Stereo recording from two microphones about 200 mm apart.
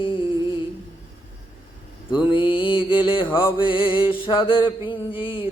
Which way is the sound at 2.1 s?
25° left (ahead or behind).